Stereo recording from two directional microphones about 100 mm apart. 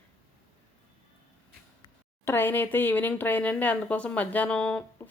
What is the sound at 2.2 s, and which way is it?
Speech, 20° left (ahead or behind).